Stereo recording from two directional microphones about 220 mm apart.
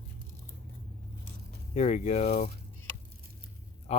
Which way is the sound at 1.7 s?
30° left (ahead or behind).